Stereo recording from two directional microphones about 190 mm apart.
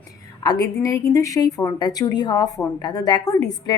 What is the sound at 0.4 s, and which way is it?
A woman's voice, 20° left (ahead or behind).